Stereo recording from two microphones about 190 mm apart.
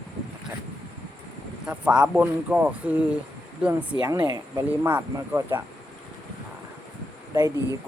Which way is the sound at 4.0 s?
20° right (ahead or behind).